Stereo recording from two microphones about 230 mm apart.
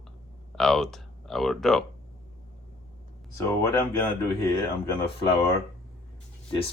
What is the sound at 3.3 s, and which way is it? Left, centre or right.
Speech, centre.